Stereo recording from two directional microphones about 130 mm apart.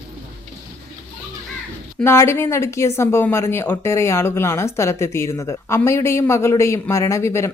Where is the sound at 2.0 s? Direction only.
20° left (ahead or behind).